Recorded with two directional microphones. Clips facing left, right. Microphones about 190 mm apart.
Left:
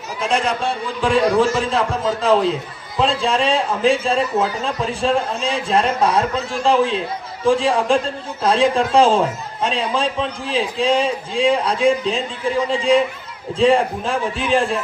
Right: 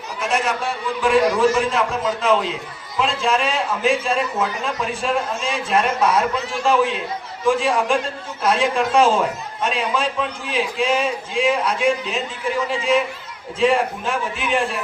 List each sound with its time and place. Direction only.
0.2 s a man's voice: 30° left (ahead or behind)